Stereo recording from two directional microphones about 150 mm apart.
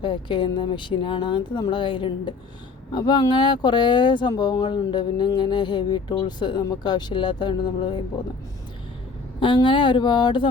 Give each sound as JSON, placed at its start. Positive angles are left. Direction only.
{"t": 0.0, "sound": "speech", "side_deg": 30}
{"t": 9.4, "sound": "speech", "side_deg": 35}